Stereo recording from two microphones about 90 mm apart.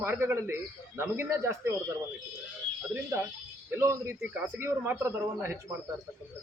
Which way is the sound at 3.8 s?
30° right (ahead or behind).